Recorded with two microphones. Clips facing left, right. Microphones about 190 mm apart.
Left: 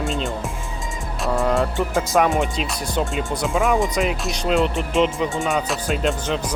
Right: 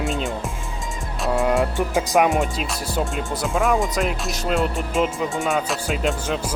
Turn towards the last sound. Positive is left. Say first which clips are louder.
# left 1 dB
turn(degrees=0)  # may be behind; listen again after turning